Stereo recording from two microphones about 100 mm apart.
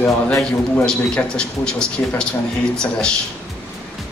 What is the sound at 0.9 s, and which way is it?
Speech, 10° left (ahead or behind).